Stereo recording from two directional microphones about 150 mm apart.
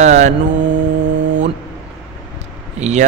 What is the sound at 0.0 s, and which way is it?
Mantra, 50° right (ahead or behind).